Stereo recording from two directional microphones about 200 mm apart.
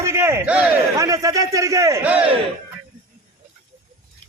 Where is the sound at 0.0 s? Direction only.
15° right (ahead or behind).